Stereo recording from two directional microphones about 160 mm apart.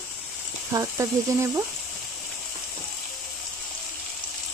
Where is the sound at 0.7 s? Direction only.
20° right (ahead or behind).